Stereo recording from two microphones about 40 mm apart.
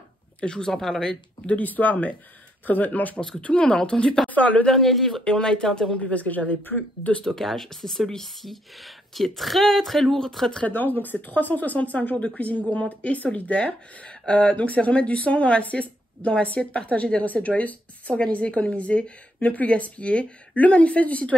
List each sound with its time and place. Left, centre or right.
0.4 s speech: left
0.7 s speech: centre
1.6 s speech: left
3.3 s speech: left
3.6 s speech: centre
4.3 s speech: left
4.7 s speech: centre
5.2 s speech: centre
5.9 s speech: left
7.2 s speech: centre
10.6 s speech: left